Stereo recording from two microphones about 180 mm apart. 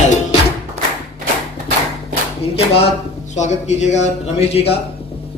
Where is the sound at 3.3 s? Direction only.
40° left (ahead or behind).